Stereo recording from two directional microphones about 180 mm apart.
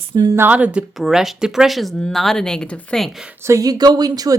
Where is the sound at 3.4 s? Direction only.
20° right (ahead or behind).